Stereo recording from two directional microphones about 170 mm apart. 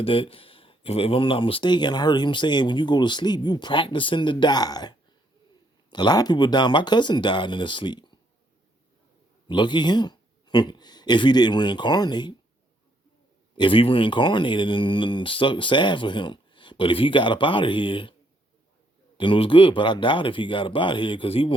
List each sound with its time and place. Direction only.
0.0 s speech: 35° left (ahead or behind)
9.5 s speech: 25° left (ahead or behind)
13.6 s speech: 30° left (ahead or behind)
19.1 s speech: 30° left (ahead or behind)